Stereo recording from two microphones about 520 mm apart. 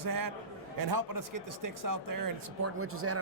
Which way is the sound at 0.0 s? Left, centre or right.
Right.